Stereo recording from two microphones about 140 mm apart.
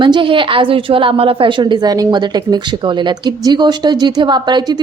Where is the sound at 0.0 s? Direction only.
35° right (ahead or behind).